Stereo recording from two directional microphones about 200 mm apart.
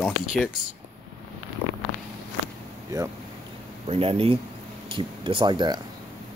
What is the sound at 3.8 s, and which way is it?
Speech, 30° right (ahead or behind).